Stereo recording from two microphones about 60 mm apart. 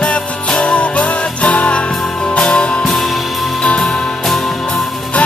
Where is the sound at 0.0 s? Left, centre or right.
Centre.